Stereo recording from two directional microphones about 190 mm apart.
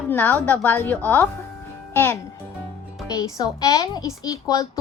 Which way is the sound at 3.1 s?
20° left (ahead or behind).